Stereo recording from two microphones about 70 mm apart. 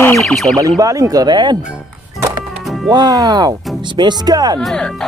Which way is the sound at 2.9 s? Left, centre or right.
Right.